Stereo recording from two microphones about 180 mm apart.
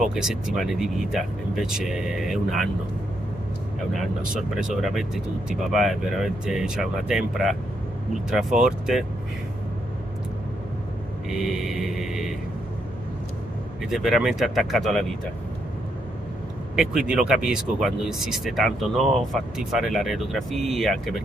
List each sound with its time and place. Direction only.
0.0 s speech: 5° right (ahead or behind)
3.9 s speech: centre (ahead or behind)
11.2 s speech: centre (ahead or behind)
13.8 s speech: centre (ahead or behind)
16.7 s speech: 5° right (ahead or behind)